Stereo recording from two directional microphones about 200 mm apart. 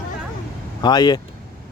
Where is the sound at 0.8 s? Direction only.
20° left (ahead or behind).